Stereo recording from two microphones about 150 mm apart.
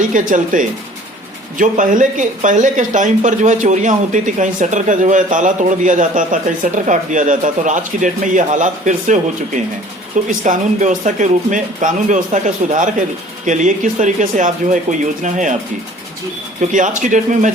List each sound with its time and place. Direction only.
0.1 s speech: 55° right (ahead or behind)
10.2 s speech: 55° right (ahead or behind)
16.6 s speech: 55° right (ahead or behind)